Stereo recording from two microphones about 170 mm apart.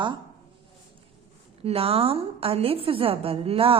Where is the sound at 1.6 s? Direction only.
35° right (ahead or behind).